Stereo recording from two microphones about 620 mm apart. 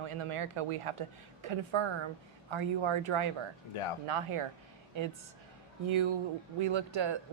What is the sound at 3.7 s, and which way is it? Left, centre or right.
Speech, left.